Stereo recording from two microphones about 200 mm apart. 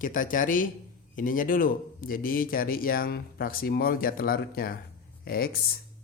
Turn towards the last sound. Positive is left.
turn(degrees=50)  # may be behind; listen again after turning